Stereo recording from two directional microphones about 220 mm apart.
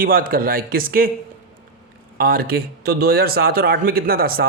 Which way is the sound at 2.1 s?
45° right (ahead or behind).